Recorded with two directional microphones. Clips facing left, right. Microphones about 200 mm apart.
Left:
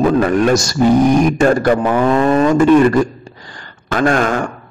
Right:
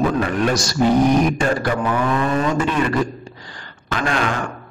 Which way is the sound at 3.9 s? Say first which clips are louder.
Left 7 dB; 45° left (ahead or behind).